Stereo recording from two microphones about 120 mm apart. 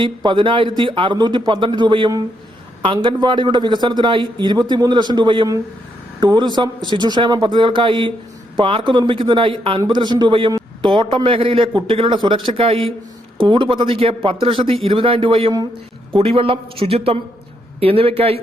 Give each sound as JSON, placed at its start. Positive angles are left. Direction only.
{"t": 0.0, "sound": "a man's voice", "side_deg": -40}